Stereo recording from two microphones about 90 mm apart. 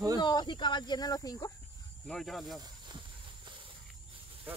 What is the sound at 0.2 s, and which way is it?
Speech, 55° left (ahead or behind).